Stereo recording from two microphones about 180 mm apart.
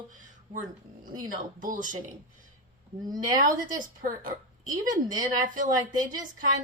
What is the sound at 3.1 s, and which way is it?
A woman's voice, 50° right (ahead or behind).